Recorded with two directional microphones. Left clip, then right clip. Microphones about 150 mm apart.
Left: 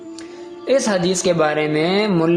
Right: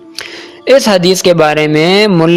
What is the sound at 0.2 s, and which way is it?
Speech, 65° right (ahead or behind).